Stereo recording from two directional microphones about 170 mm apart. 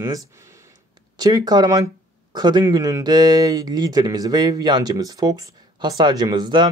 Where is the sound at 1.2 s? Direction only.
25° right (ahead or behind).